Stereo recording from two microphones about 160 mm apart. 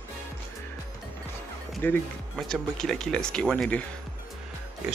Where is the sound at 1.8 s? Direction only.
10° left (ahead or behind).